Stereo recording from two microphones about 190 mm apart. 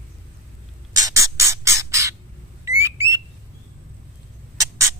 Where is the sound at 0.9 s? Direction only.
15° right (ahead or behind).